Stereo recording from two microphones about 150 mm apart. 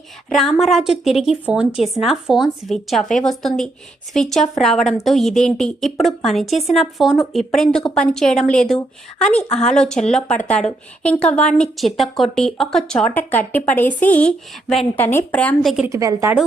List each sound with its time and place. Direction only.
0.3 s a woman's voice: centre (ahead or behind)
15.6 s a woman's voice: centre (ahead or behind)
15.9 s a woman's voice: 20° right (ahead or behind)